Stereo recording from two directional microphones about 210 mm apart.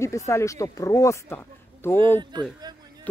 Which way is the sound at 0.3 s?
15° left (ahead or behind).